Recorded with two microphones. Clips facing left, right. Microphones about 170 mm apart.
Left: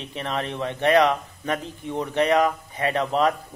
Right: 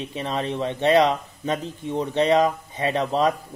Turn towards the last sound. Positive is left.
turn(degrees=-20)  # may be behind; listen again after turning